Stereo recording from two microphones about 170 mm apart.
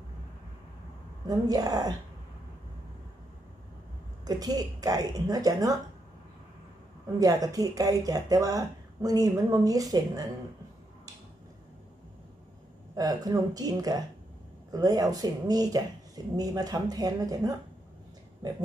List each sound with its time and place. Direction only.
1.2 s speech: 20° right (ahead or behind)
4.2 s speech: 25° right (ahead or behind)
7.2 s speech: 20° right (ahead or behind)
12.9 s speech: 20° right (ahead or behind)
18.4 s speech: 25° right (ahead or behind)